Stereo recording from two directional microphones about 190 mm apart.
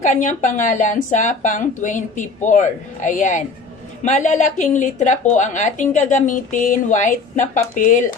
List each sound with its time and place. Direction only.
0.0 s a woman's voice: 40° left (ahead or behind)